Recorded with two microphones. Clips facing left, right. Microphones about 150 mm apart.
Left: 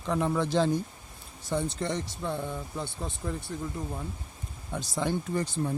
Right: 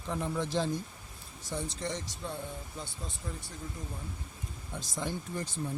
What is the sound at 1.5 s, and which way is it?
Speech, 60° left (ahead or behind).